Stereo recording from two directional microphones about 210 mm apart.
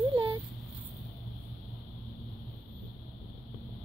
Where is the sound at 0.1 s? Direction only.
20° right (ahead or behind).